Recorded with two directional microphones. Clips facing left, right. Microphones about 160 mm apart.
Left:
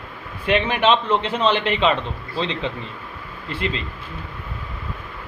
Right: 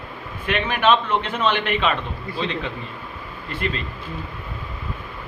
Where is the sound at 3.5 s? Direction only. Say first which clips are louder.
Left 1 dB; 25° left (ahead or behind).